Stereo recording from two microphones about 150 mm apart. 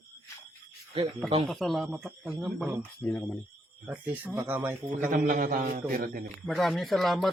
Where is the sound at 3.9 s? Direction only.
10° right (ahead or behind).